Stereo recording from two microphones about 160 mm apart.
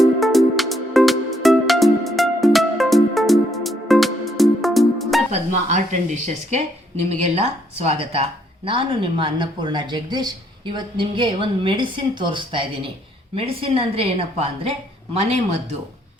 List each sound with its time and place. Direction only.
0.0 s music: centre (ahead or behind)
5.3 s speech: 50° right (ahead or behind)